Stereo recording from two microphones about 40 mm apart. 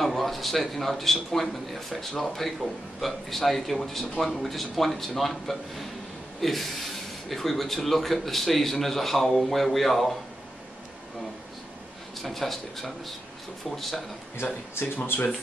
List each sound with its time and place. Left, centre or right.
0.0 s a man's voice: centre
12.2 s a man's voice: centre
14.3 s speech: left